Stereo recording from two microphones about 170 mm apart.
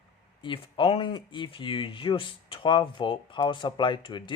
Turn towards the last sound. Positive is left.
turn(degrees=30)  # may be behind; listen again after turning